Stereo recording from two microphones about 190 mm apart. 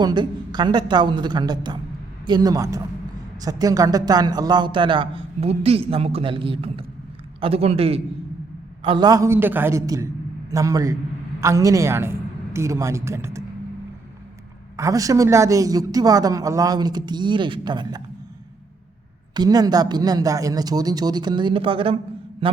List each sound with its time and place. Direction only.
0.0 s a man's voice: 25° right (ahead or behind)
14.8 s a man's voice: 15° right (ahead or behind)
19.3 s a man's voice: 20° right (ahead or behind)